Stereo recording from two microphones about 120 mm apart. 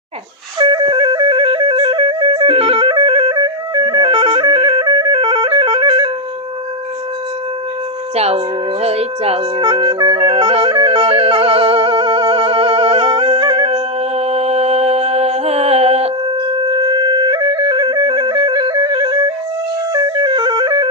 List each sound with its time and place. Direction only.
0.7 s music: 40° right (ahead or behind)
8.1 s a sound: 60° right (ahead or behind)
8.8 s music: 60° right (ahead or behind)
9.6 s music: 40° right (ahead or behind); by 16.1 s 60° right (ahead or behind)
16.6 s music: 40° right (ahead or behind)